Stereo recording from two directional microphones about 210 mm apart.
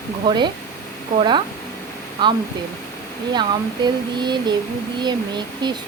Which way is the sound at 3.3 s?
20° right (ahead or behind).